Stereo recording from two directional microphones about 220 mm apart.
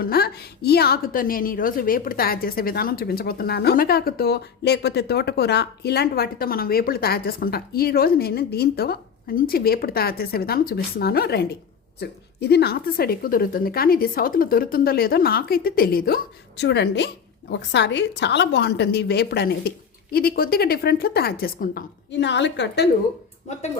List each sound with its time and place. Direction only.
0.0 s a woman's voice: 45° left (ahead or behind)